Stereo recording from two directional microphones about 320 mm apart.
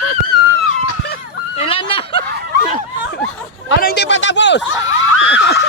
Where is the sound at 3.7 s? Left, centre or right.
Left.